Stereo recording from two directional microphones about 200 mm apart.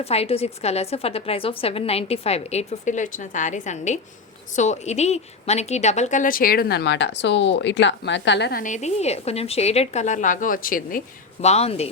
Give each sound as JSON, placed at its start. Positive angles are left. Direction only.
{"t": 0.0, "sound": "a woman's voice", "side_deg": 30}
{"t": 8.6, "sound": "a woman's voice", "side_deg": 35}
{"t": 11.3, "sound": "a woman's voice", "side_deg": 30}